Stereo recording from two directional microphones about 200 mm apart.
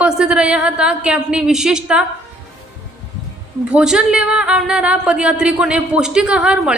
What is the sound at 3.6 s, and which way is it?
A woman's voice, 5° right (ahead or behind).